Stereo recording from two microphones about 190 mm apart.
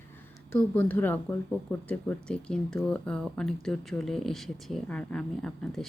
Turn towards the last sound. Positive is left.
turn(degrees=5)  # may be behind; listen again after turning